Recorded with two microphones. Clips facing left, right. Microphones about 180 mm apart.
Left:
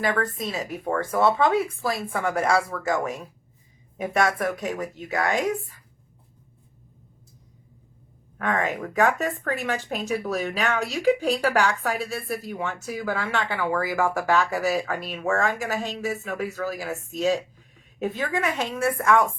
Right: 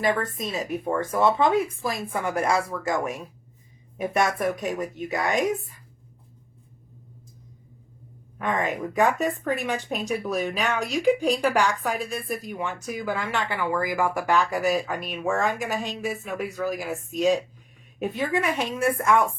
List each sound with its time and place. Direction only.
0.0 s speech: 20° right (ahead or behind)
8.4 s speech: 15° right (ahead or behind)